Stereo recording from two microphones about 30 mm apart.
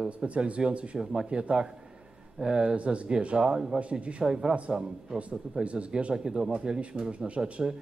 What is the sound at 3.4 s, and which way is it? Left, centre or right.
Speech, right.